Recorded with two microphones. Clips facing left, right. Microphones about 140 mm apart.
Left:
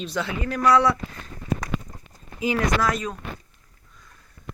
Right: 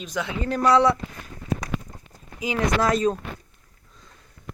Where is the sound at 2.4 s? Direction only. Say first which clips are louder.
Even; 20° right (ahead or behind).